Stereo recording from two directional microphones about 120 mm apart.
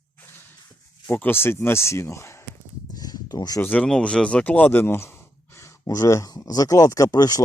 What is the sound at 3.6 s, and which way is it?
Speech, 10° left (ahead or behind).